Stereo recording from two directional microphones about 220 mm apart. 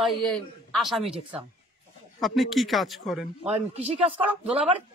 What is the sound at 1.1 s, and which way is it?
Speech, 25° right (ahead or behind).